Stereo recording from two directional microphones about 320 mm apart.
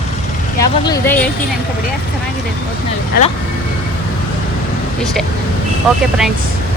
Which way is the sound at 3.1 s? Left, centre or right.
Left.